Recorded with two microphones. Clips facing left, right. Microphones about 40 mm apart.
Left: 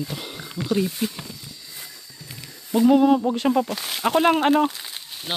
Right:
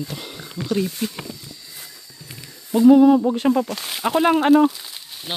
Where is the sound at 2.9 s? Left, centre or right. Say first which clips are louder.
Right 5 dB; left.